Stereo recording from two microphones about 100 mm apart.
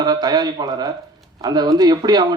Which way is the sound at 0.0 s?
45° right (ahead or behind).